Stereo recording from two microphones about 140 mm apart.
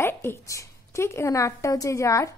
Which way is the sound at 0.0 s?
15° left (ahead or behind).